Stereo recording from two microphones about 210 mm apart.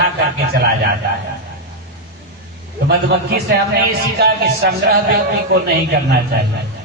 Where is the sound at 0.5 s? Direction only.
50° right (ahead or behind).